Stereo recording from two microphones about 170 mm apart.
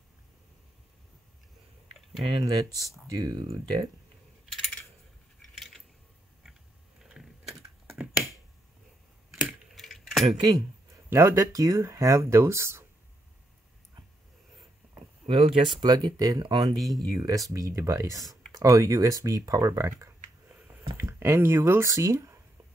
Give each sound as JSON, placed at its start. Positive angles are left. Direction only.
{"t": 2.2, "sound": "speech", "side_deg": -25}
{"t": 4.5, "sound": "coin", "side_deg": 0}
{"t": 7.0, "sound": "typing", "side_deg": 0}
{"t": 9.3, "sound": "a sound", "side_deg": 0}
{"t": 11.1, "sound": "speech", "side_deg": -15}
{"t": 15.2, "sound": "speech", "side_deg": -35}
{"t": 16.7, "sound": "speech", "side_deg": 0}
{"t": 17.0, "sound": "speech", "side_deg": -20}